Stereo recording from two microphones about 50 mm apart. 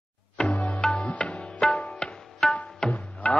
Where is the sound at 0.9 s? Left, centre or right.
Left.